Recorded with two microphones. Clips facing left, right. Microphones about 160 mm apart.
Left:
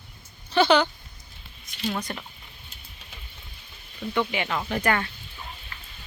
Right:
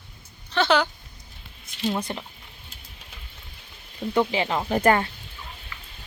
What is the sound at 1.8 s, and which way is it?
Speech, 25° right (ahead or behind).